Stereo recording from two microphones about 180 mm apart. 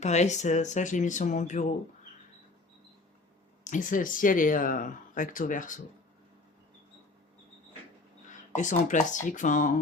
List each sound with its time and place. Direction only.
0.0 s speech: 40° left (ahead or behind)
3.6 s speech: 45° left (ahead or behind)
8.3 s speech: 45° left (ahead or behind)